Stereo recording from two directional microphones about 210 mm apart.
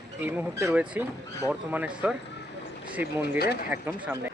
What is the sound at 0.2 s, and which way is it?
Speech, 10° right (ahead or behind).